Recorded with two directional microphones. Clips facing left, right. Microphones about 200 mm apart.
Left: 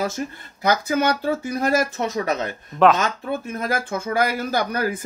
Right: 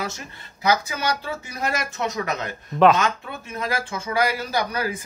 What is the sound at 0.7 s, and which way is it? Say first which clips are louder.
Speech: left 3 dB; 50° left (ahead or behind).